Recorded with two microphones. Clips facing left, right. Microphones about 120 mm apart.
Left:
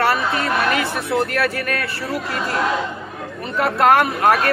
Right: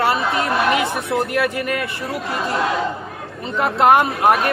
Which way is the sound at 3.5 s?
20° right (ahead or behind).